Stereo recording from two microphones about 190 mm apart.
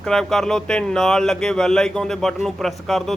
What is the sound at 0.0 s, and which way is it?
Speech, 5° left (ahead or behind).